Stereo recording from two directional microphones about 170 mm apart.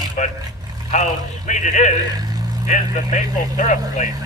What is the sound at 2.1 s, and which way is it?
Vehicle, 20° right (ahead or behind).